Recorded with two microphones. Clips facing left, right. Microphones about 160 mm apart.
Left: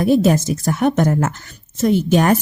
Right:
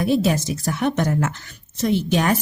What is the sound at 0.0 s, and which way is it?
Speech, 45° left (ahead or behind).